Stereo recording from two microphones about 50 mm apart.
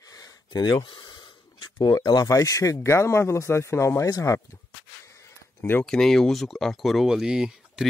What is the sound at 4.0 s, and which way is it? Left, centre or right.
Speech, left.